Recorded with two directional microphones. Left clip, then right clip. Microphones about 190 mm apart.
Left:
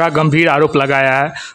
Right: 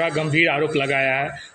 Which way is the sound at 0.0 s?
40° left (ahead or behind).